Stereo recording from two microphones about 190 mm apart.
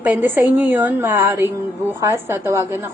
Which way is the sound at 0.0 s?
10° right (ahead or behind).